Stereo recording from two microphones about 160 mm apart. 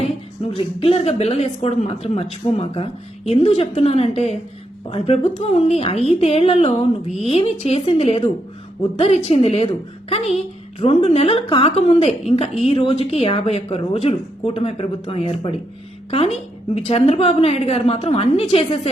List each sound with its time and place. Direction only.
0.0 s a woman's voice: 35° left (ahead or behind)